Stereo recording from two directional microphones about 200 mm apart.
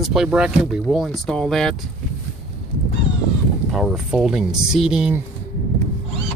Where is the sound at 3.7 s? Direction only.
Centre (ahead or behind).